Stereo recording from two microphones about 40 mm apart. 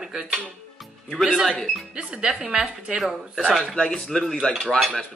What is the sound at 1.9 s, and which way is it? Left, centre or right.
Speech, right.